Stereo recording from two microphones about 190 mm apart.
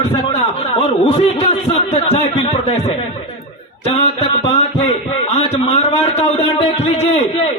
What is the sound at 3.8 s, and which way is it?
A man's voice, 35° left (ahead or behind).